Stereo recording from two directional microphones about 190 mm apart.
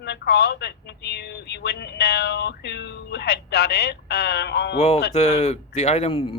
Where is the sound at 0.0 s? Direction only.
60° left (ahead or behind).